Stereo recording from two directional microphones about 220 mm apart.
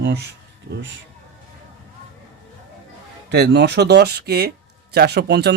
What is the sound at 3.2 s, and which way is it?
Speech, 50° right (ahead or behind).